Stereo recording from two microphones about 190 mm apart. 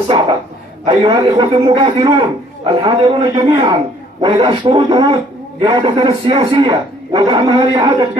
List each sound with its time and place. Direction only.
0.8 s a man's voice: 25° right (ahead or behind)